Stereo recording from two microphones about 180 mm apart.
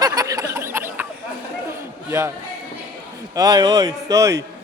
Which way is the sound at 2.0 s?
15° right (ahead or behind).